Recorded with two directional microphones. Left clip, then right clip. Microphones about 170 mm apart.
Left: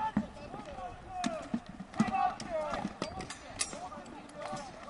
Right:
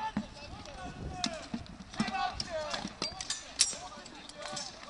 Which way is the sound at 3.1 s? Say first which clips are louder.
Right 6 dB; 10° right (ahead or behind).